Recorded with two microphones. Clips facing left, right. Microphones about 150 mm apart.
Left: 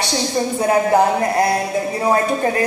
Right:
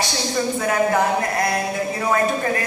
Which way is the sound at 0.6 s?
30° left (ahead or behind).